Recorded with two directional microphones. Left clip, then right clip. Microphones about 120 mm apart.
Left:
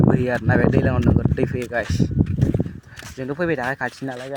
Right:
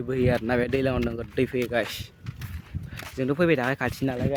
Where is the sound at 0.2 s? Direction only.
5° right (ahead or behind).